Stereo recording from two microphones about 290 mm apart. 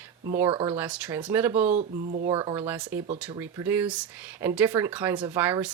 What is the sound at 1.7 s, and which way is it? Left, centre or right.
Speech, right.